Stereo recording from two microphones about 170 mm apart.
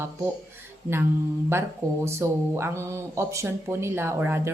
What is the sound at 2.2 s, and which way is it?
Speech, 15° right (ahead or behind).